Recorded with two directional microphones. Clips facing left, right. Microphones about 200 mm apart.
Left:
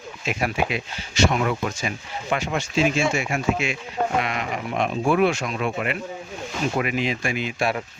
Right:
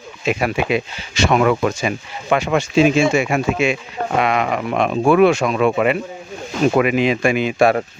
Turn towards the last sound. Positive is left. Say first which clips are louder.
# right 10 dB
turn(degrees=-50)  # may be behind; listen again after turning